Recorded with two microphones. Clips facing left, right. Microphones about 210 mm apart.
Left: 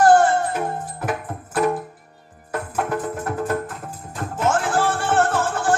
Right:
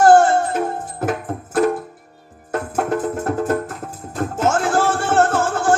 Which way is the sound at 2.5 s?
45° right (ahead or behind).